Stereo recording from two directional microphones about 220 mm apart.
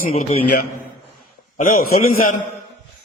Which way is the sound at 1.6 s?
40° left (ahead or behind).